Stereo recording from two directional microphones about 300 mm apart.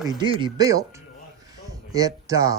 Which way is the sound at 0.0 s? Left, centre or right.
Centre.